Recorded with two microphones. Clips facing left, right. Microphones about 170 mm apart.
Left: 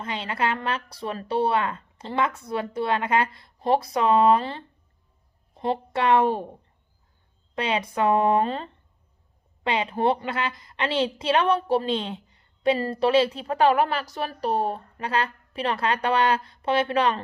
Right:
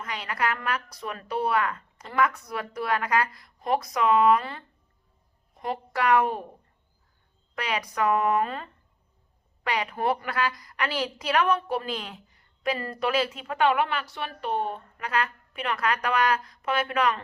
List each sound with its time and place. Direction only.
0.0 s a woman's voice: 25° left (ahead or behind)
7.5 s a woman's voice: 25° left (ahead or behind)